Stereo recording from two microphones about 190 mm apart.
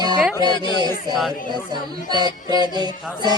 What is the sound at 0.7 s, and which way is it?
Music, 20° right (ahead or behind).